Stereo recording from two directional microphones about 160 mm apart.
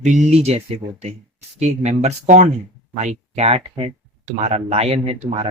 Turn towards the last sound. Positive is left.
turn(degrees=-40)  # may be behind; listen again after turning